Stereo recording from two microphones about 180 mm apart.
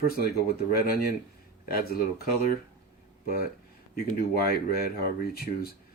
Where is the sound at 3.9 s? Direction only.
55° left (ahead or behind).